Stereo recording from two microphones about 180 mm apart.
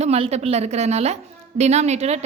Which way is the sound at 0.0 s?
35° right (ahead or behind).